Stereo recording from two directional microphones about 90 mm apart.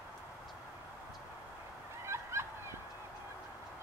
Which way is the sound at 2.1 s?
30° right (ahead or behind).